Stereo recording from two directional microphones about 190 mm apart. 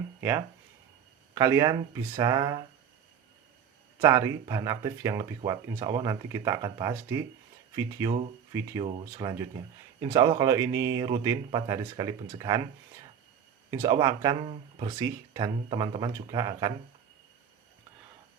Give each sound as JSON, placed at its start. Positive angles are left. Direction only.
{"t": 0.2, "sound": "speech", "side_deg": -10}
{"t": 4.0, "sound": "speech", "side_deg": -20}
{"t": 13.7, "sound": "speech", "side_deg": -20}
{"t": 14.4, "sound": "speech", "side_deg": -30}
{"t": 14.9, "sound": "speech", "side_deg": -15}